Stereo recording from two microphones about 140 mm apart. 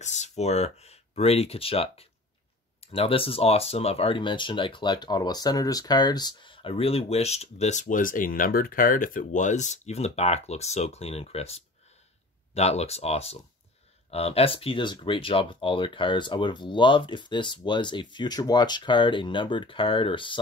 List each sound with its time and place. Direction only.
0.0 s speech: 55° left (ahead or behind); by 20.3 s 35° left (ahead or behind)